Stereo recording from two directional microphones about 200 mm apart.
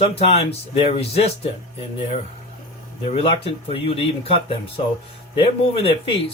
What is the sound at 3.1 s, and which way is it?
Speech, 25° left (ahead or behind).